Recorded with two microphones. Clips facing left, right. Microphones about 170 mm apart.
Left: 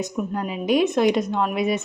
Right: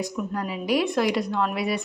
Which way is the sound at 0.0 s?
20° left (ahead or behind).